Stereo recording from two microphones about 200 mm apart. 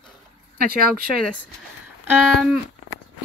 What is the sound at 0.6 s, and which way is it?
Speech, 50° right (ahead or behind).